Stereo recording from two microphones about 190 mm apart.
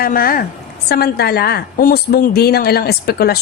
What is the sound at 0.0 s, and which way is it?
A woman's voice, 50° left (ahead or behind).